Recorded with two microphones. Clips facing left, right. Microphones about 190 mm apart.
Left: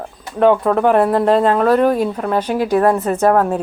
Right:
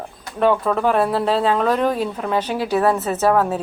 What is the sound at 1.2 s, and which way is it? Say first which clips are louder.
Speech: left 5 dB; 50° left (ahead or behind).